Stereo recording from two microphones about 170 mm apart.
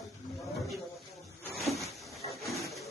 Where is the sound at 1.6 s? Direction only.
Centre (ahead or behind).